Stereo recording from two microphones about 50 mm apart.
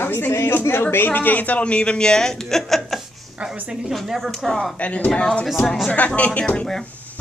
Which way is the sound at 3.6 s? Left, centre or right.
Right.